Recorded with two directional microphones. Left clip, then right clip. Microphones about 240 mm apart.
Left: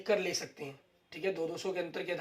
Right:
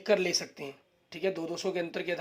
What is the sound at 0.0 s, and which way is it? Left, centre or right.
Speech, right.